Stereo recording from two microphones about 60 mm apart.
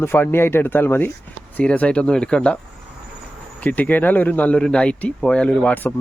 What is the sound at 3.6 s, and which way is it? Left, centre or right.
Speech, left.